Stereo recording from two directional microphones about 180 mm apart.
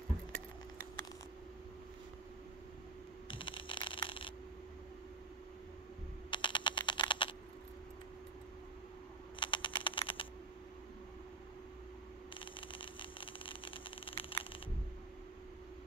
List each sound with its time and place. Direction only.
3.3 s a sound: 30° left (ahead or behind)
6.3 s typing: 25° left (ahead or behind)
9.4 s typing: 30° left (ahead or behind)
12.4 s vehicle: 30° left (ahead or behind)